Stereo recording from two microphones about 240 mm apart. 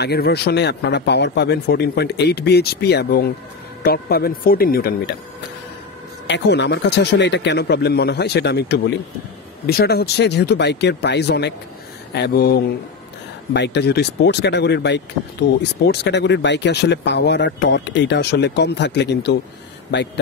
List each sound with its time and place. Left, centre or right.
0.0 s speech: left
6.2 s speech: left